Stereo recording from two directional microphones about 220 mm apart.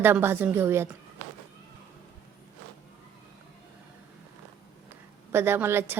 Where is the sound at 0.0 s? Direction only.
10° right (ahead or behind).